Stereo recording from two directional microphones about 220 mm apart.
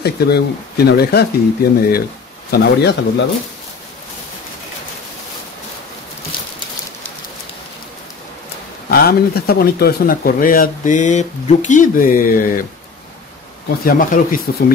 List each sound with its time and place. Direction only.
0.0 s speech: 45° left (ahead or behind)
8.8 s speech: 45° left (ahead or behind)
13.8 s speech: 40° left (ahead or behind)